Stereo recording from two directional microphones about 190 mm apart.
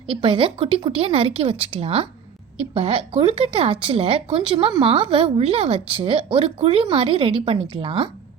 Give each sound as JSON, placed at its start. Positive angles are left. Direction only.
{"t": 0.1, "sound": "a woman's voice", "side_deg": -25}